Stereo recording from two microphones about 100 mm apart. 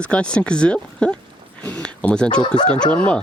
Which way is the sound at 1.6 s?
15° left (ahead or behind).